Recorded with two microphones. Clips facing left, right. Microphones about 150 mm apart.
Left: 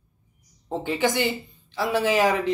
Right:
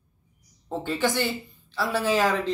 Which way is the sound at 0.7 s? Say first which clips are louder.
Left 2 dB; 15° left (ahead or behind).